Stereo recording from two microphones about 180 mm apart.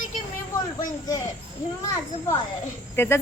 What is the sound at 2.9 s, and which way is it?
Speech, 10° left (ahead or behind).